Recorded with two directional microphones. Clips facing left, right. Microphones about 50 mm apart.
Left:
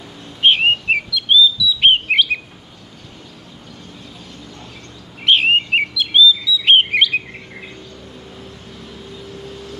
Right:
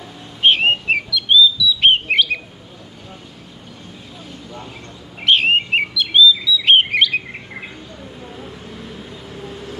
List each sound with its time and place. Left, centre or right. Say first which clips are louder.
0.4 s bird: left 1 dB; centre
5.2 s bird: left 1 dB; centre
9.3 s vehicle: right 2 dB; centre